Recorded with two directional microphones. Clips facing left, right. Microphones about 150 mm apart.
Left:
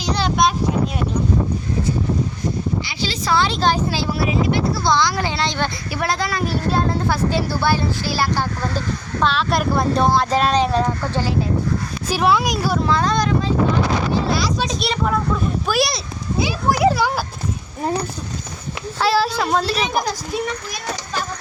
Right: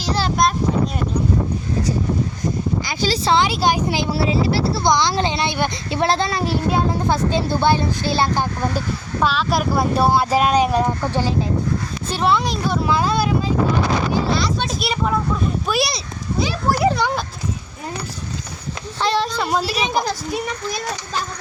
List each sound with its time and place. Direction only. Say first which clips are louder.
0.0 s a sound: left 1 dB; centre (ahead or behind)
2.8 s speech: right 5 dB; 45° right (ahead or behind)
3.2 s speech: even; 20° right (ahead or behind)
4.8 s speech: right 1 dB; 20° right (ahead or behind)
5.9 s speech: right 6 dB; 25° right (ahead or behind)
9.2 s speech: even; centre (ahead or behind)
12.0 s speech: left 2 dB; 5° left (ahead or behind)
12.8 s speech: right 1 dB; 10° right (ahead or behind)
16.4 s children playing: left 1 dB; 5° left (ahead or behind)
19.0 s speech: left 2 dB; 5° left (ahead or behind)